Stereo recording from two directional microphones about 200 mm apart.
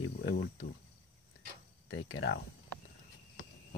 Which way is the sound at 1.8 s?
85° left.